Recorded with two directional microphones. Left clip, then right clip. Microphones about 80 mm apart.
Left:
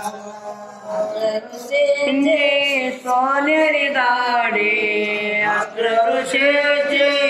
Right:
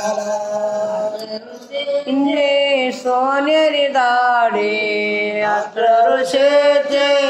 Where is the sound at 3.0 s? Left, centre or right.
Right.